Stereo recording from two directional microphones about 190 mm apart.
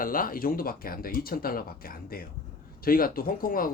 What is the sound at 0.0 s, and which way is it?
Speech, 50° left (ahead or behind).